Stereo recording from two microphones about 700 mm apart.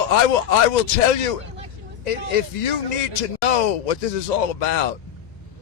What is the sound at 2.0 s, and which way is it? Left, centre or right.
Speech, left.